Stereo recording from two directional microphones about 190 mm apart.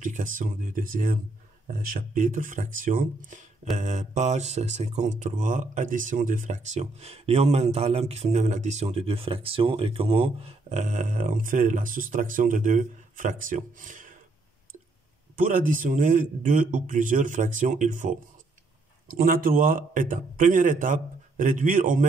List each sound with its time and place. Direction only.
0.0 s speech: 45° right (ahead or behind)
15.3 s speech: 45° right (ahead or behind)